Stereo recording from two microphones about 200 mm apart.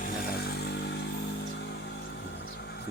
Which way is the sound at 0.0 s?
50° left (ahead or behind).